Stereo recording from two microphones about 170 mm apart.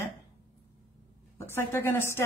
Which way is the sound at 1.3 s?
15° left (ahead or behind).